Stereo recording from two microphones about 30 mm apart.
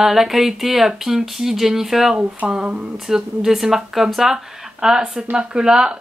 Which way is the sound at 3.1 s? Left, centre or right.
Centre.